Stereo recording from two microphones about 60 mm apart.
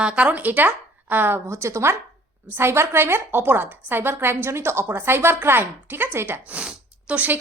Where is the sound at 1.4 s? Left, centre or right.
Right.